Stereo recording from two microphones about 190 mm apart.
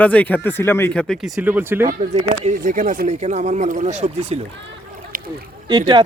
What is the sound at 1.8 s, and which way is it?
Speech, 35° right (ahead or behind).